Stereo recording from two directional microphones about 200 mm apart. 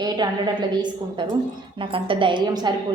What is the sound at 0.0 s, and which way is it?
A woman's voice, 20° right (ahead or behind).